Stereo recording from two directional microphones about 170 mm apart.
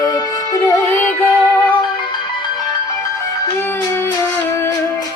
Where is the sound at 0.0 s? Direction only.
20° left (ahead or behind).